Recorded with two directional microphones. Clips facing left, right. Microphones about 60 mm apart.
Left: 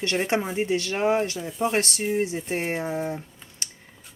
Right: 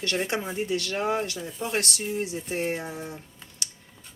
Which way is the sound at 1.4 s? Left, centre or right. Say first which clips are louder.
Left 7 dB; centre.